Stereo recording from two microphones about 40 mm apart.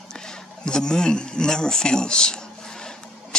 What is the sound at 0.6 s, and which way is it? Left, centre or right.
A man's voice, centre.